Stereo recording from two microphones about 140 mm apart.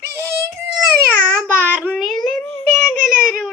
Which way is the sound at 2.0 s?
Centre (ahead or behind).